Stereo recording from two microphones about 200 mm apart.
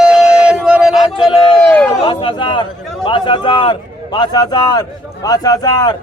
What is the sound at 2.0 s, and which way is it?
A man's voice, 25° left (ahead or behind).